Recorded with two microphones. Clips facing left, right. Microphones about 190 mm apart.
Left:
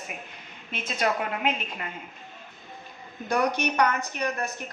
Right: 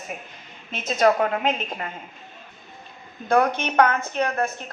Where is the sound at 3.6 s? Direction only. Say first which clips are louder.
Right 4 dB; 55° right (ahead or behind).